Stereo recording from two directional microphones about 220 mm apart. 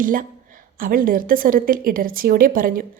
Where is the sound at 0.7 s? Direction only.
40° right (ahead or behind).